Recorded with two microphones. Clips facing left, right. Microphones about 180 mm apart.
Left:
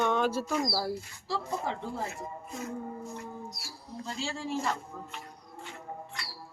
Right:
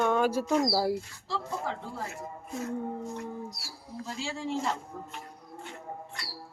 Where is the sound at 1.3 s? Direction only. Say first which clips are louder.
Left 1 dB; 15° left (ahead or behind).